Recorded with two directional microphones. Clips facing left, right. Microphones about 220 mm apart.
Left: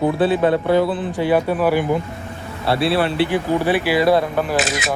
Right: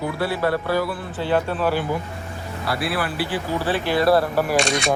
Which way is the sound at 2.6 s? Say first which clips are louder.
Left 7 dB; 25° left (ahead or behind).